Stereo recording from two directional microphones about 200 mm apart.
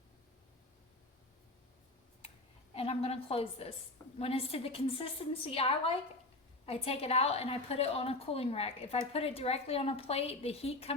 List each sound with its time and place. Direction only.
2.7 s a woman's voice: 30° left (ahead or behind)